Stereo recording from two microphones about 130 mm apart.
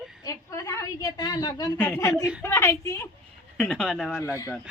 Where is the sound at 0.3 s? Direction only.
25° left (ahead or behind).